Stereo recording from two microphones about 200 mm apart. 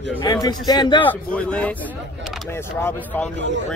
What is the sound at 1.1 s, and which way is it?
Speech, 5° left (ahead or behind).